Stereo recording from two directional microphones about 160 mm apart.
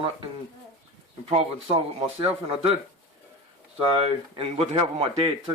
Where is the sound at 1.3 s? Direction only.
40° right (ahead or behind).